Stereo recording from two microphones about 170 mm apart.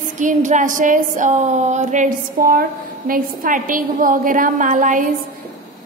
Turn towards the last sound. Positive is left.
turn(degrees=-50)  # may be behind; listen again after turning